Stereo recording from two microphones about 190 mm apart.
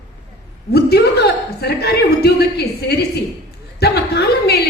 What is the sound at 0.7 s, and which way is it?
A woman's voice, 55° left (ahead or behind).